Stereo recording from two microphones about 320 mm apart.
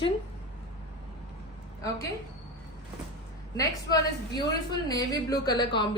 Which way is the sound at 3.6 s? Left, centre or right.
Centre.